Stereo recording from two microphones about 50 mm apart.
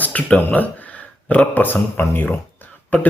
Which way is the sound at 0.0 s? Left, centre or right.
Left.